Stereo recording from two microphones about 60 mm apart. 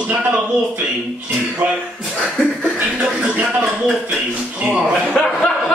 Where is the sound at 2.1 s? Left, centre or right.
Centre.